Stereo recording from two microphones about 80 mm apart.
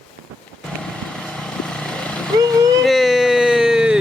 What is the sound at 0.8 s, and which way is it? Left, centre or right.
Vehicle, centre.